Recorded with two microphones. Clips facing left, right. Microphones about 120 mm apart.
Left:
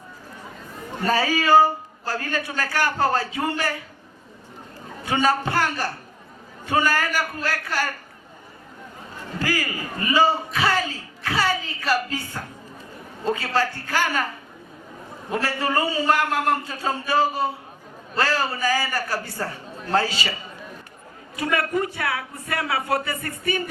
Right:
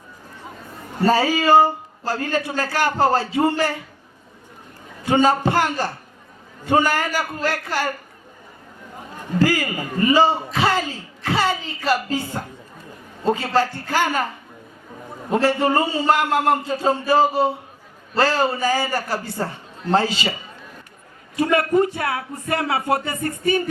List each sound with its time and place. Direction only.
1.0 s a man's voice: 25° right (ahead or behind)
5.0 s a man's voice: 25° right (ahead or behind)
9.4 s a man's voice: 25° right (ahead or behind)
15.3 s a man's voice: 25° right (ahead or behind)
21.3 s speech: 30° right (ahead or behind)